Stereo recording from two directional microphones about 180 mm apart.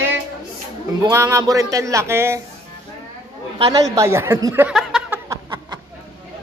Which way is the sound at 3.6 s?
20° right (ahead or behind).